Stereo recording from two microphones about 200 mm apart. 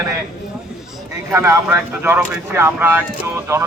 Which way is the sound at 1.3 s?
15° right (ahead or behind).